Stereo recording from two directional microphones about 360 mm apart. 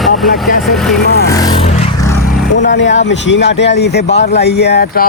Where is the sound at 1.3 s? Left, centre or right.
Centre.